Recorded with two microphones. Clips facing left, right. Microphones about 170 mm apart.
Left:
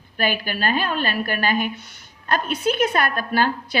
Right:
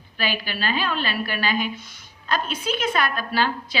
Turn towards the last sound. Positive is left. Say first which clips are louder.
# left 3 dB
turn(degrees=50)  # may be behind; listen again after turning